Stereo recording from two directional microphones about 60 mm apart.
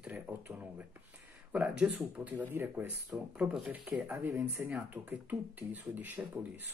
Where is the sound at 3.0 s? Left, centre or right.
Right.